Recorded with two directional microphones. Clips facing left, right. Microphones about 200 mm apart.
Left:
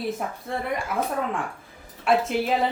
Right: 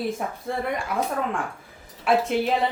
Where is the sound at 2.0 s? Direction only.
Centre (ahead or behind).